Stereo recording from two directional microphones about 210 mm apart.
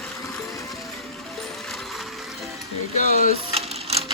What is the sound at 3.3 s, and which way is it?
Sewing machine, 30° right (ahead or behind).